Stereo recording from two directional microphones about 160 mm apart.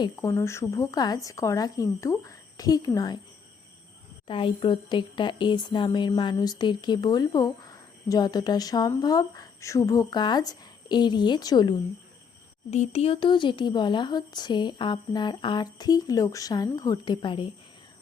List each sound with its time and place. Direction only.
0.0 s speech: 20° left (ahead or behind)
4.3 s speech: 30° left (ahead or behind)
12.7 s speech: 40° left (ahead or behind)